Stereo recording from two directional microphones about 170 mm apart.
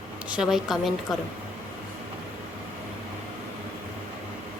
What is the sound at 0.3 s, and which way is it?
Speech, 5° right (ahead or behind).